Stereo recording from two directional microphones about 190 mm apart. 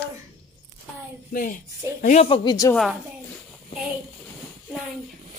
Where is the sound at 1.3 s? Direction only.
45° left (ahead or behind).